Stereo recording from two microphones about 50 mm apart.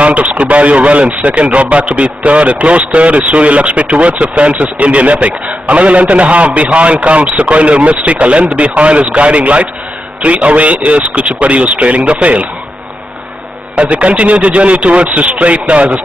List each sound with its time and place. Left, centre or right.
0.0 s a man's voice: right
13.7 s a man's voice: right